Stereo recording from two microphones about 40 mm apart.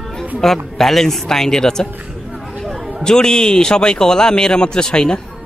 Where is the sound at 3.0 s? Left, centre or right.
Centre.